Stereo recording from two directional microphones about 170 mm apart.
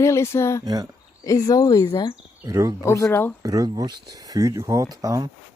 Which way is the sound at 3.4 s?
20° right (ahead or behind).